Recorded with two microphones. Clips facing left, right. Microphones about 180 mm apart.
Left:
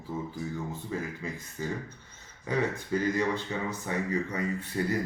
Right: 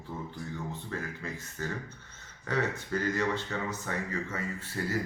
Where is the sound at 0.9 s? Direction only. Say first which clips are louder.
Left 3 dB; 10° left (ahead or behind).